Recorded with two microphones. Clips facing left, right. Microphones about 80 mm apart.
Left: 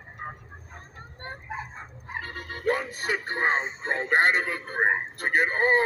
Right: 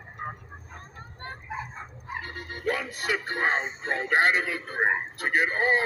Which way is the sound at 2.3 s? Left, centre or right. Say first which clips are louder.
Left 3 dB; left.